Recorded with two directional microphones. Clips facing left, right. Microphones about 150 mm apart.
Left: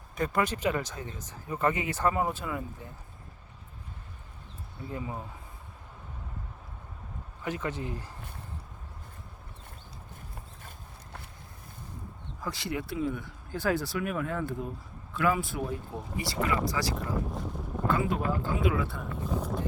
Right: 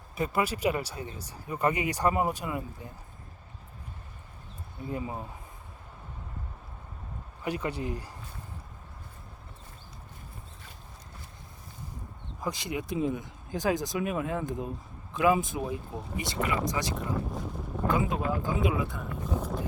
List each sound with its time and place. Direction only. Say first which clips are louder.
0.2 s speech: even; 10° right (ahead or behind)
4.9 s speech: right 2 dB; 20° right (ahead or behind)
7.4 s speech: right 1 dB; 15° right (ahead or behind)
12.4 s speech: right 1 dB; 15° right (ahead or behind)
16.9 s speech: even; centre (ahead or behind)
17.8 s speech: even; 15° right (ahead or behind)
19.1 s speech: left 1 dB; 10° right (ahead or behind)